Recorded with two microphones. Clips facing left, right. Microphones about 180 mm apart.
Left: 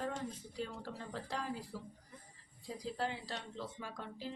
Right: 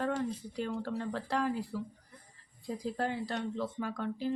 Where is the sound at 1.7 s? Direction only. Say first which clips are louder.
Right 9 dB; 60° right (ahead or behind).